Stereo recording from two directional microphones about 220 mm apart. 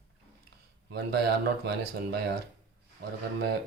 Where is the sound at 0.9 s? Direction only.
50° right (ahead or behind).